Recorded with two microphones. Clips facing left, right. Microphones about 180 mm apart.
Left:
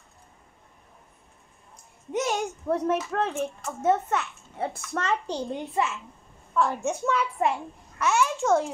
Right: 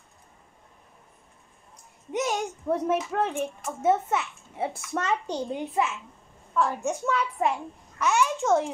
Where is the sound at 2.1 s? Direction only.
Centre (ahead or behind).